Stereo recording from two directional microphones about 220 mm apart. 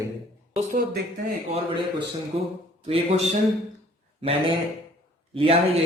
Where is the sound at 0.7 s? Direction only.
40° right (ahead or behind).